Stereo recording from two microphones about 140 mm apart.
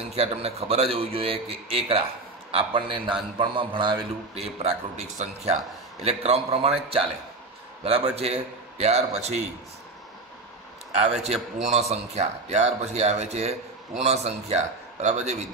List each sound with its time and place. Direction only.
0.1 s a man's voice: 45° right (ahead or behind)
11.5 s speech: 55° right (ahead or behind)